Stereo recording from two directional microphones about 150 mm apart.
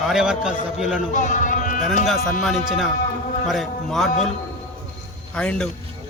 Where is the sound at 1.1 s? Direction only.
55° left (ahead or behind).